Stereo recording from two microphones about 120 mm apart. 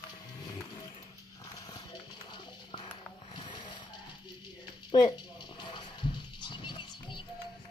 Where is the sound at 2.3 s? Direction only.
40° left (ahead or behind).